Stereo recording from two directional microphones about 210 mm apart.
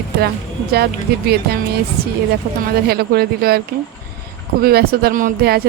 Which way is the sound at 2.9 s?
50° right (ahead or behind).